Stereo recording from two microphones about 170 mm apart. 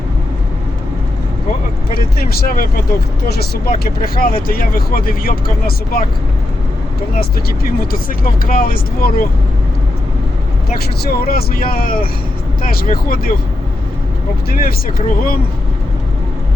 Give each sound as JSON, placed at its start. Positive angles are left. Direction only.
{"t": 1.9, "sound": "speech", "side_deg": 60}
{"t": 7.2, "sound": "speech", "side_deg": 60}
{"t": 11.0, "sound": "speech", "side_deg": 60}
{"t": 14.5, "sound": "speech", "side_deg": 60}